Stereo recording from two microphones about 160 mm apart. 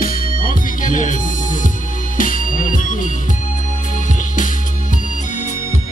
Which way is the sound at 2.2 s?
55° left (ahead or behind).